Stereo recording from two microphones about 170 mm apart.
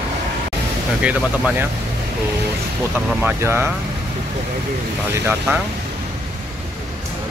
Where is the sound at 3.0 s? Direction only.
10° right (ahead or behind).